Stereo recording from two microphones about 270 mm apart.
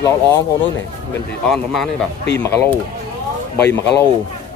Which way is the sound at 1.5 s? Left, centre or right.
Centre.